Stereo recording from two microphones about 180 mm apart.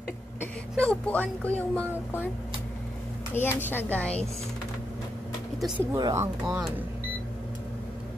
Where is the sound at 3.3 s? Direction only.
10° left (ahead or behind).